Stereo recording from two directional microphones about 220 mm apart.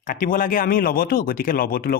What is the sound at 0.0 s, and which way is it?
Speech, 40° left (ahead or behind).